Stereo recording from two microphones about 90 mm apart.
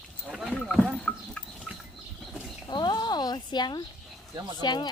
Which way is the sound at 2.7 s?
50° left (ahead or behind).